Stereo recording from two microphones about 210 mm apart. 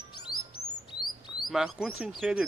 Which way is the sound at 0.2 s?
90° left.